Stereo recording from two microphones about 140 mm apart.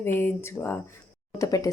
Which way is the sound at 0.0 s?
15° left (ahead or behind).